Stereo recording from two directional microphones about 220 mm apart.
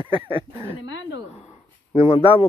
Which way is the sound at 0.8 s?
55° left (ahead or behind).